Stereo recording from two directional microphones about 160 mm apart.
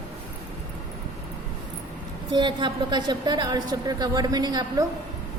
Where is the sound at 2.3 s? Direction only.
30° right (ahead or behind).